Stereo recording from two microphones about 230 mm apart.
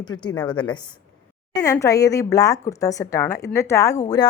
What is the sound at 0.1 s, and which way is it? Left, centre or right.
A woman's voice, centre.